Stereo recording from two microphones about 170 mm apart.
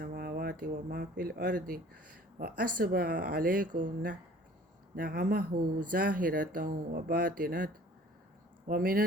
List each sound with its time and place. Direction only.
0.0 s speech: 60° right (ahead or behind)